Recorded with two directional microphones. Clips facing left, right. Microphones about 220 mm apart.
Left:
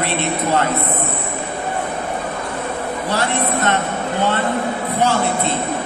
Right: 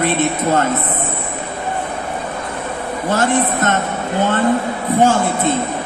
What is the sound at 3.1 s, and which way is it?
Speech, 50° right (ahead or behind).